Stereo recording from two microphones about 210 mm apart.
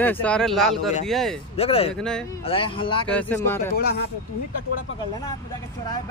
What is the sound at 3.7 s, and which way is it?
Speech, 50° left (ahead or behind).